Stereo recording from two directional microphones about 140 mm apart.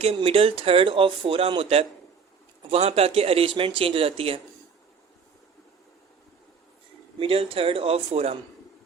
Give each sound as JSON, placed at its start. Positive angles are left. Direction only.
{"t": 0.2, "sound": "speech", "side_deg": -45}
{"t": 7.2, "sound": "speech", "side_deg": -40}